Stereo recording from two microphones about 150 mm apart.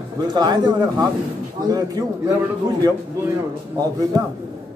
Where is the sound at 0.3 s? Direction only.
30° right (ahead or behind).